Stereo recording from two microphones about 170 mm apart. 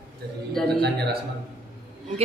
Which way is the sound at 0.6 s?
5° left (ahead or behind).